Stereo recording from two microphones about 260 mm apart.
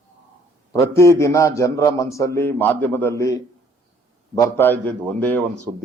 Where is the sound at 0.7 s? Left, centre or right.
Centre.